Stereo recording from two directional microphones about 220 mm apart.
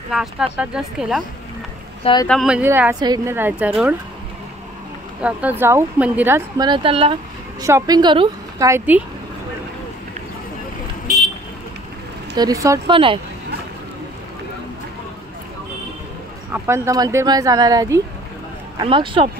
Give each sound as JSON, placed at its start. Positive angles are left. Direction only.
{"t": 0.1, "sound": "speech", "side_deg": 0}
{"t": 2.2, "sound": "speech", "side_deg": 0}
{"t": 5.2, "sound": "speech", "side_deg": -5}
{"t": 6.7, "sound": "speech", "side_deg": -25}
{"t": 12.4, "sound": "speech", "side_deg": -15}
{"t": 16.5, "sound": "speech", "side_deg": -10}